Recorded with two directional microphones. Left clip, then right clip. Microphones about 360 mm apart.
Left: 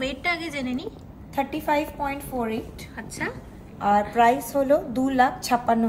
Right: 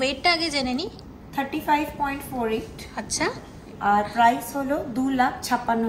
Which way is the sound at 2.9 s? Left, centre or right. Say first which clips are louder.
Right 5 dB; centre.